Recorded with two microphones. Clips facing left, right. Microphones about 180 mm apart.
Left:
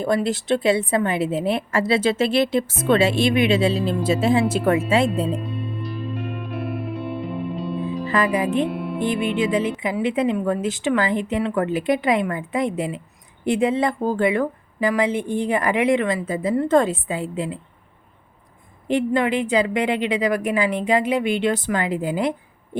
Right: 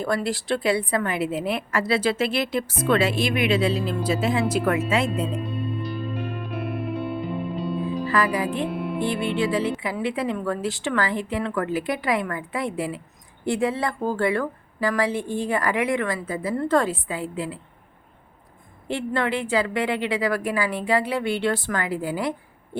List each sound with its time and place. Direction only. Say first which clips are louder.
0.0 s a woman's voice: left 4 dB; 20° left (ahead or behind)
5.4 s music: right 1 dB; centre (ahead or behind)
8.0 s music: left 3 dB; 20° left (ahead or behind)
8.7 s music: left 1 dB; centre (ahead or behind)
9.0 s a woman's voice: left 3 dB; 15° left (ahead or behind)
18.9 s a woman's voice: left 5 dB; 15° left (ahead or behind)